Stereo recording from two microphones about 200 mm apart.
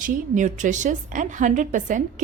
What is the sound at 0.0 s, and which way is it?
A woman's voice, 40° right (ahead or behind).